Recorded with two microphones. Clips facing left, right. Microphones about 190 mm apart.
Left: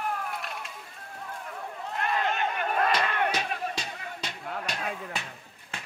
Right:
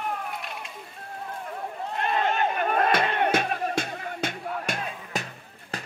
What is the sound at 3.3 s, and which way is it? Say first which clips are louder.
Music: right 5 dB; 50° right (ahead or behind).